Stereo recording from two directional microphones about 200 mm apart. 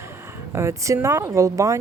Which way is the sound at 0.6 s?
15° right (ahead or behind).